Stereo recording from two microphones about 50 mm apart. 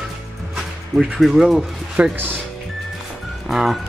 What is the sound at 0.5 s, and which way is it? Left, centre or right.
Music, right.